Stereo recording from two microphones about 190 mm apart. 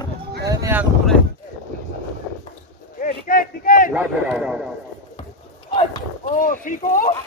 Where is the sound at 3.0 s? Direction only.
50° left (ahead or behind).